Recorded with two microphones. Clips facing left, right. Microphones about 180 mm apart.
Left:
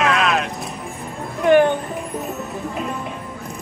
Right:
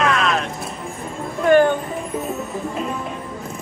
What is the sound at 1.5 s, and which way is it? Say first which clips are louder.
Speech: even; 20° left (ahead or behind).